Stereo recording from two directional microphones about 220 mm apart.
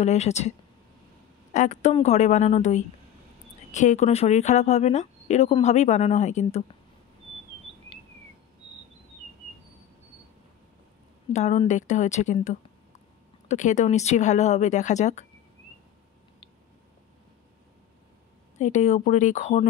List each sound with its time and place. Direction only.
0.0 s speech: 30° left (ahead or behind)
11.3 s speech: 30° left (ahead or behind)
18.6 s speech: 30° left (ahead or behind)